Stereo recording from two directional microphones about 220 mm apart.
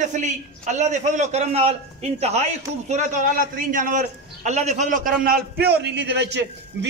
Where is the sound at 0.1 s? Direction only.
35° right (ahead or behind).